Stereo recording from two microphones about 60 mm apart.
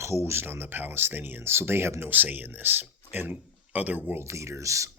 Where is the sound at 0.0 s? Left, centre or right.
Right.